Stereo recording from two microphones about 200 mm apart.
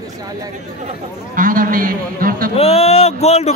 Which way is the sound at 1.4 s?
45° right (ahead or behind).